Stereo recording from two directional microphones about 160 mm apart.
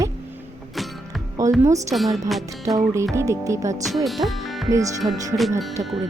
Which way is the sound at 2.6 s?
20° right (ahead or behind).